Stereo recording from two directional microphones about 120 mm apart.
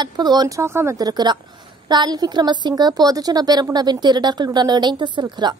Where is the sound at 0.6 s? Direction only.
20° right (ahead or behind).